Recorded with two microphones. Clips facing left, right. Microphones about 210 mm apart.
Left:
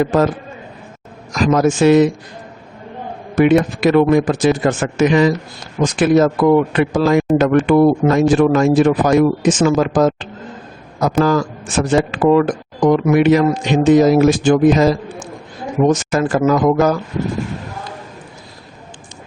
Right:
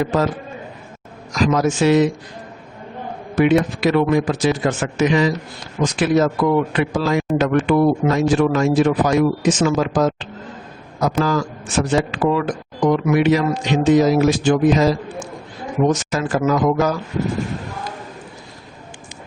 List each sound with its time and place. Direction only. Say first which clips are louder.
0.0 s a man's voice: left 4 dB; 50° left (ahead or behind)
1.8 s a man's voice: left 4 dB; 55° left (ahead or behind)
3.3 s a man's voice: left 3 dB; 50° left (ahead or behind)